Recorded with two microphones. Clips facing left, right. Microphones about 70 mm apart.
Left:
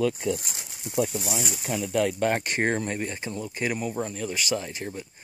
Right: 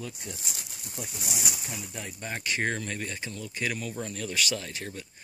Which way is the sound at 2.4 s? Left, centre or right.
Left.